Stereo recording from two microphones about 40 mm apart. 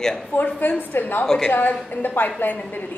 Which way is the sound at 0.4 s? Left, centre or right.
Left.